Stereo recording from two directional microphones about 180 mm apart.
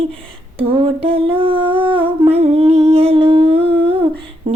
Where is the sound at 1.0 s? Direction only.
30° right (ahead or behind).